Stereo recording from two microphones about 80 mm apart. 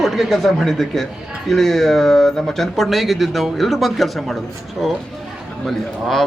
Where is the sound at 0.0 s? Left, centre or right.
Centre.